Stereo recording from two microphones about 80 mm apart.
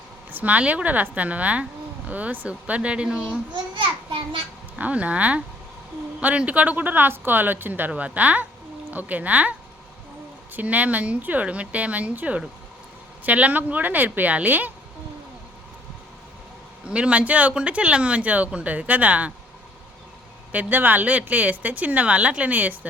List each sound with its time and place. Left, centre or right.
0.3 s speech: right
3.5 s a sound: right
4.8 s speech: centre
16.9 s speech: centre
20.5 s speech: right